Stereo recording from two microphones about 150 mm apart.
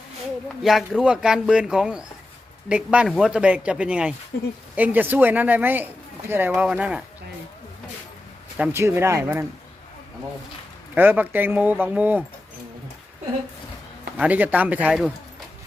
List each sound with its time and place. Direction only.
0.6 s speech: centre (ahead or behind)
8.7 s speech: 15° right (ahead or behind)
10.9 s speech: 10° right (ahead or behind)
14.2 s speech: 10° right (ahead or behind)